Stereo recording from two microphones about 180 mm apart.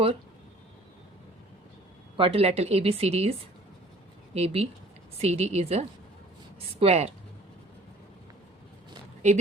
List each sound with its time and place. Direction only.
2.1 s a woman's voice: 30° right (ahead or behind)
4.4 s a woman's voice: 35° right (ahead or behind)
9.2 s a woman's voice: 40° right (ahead or behind)